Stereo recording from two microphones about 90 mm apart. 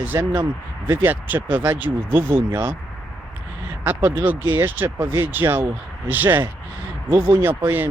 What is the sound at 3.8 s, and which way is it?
Speech, 25° right (ahead or behind).